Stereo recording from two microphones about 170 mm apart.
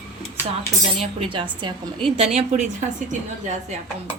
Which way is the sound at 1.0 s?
30° right (ahead or behind).